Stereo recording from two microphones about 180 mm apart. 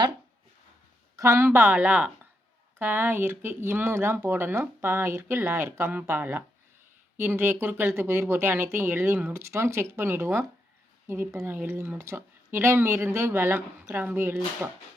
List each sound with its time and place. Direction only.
1.1 s speech: 15° right (ahead or behind)